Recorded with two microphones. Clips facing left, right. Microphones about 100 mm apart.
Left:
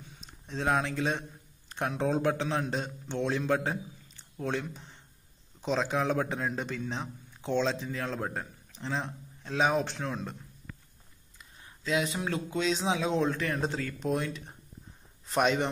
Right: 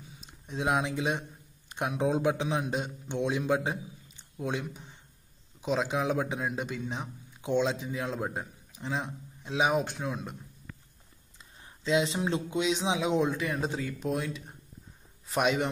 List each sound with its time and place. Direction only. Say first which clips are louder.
0.1 s a man's voice: even; 5° right (ahead or behind)
11.6 s a man's voice: right 3 dB; 25° right (ahead or behind); by 15.7 s 5° right (ahead or behind)